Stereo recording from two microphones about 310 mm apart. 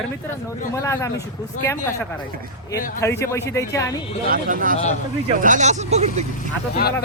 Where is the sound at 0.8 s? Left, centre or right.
Centre.